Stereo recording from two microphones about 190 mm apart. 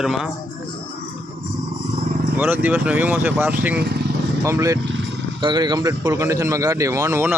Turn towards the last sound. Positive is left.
turn(degrees=-15)  # may be behind; listen again after turning